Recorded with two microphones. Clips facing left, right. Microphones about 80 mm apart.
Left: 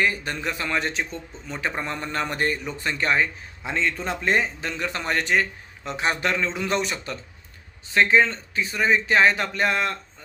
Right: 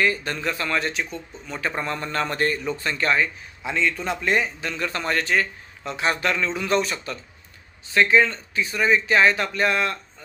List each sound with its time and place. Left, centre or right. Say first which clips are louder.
0.0 s a man's voice: right 2 dB; centre